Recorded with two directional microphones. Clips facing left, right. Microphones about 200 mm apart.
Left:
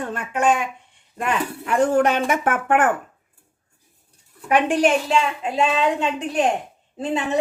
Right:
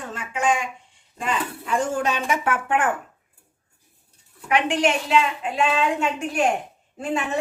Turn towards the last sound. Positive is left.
turn(degrees=20)  # may be behind; listen again after turning